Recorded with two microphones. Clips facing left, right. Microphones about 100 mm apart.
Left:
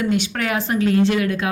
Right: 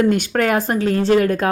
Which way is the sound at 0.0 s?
50° right (ahead or behind).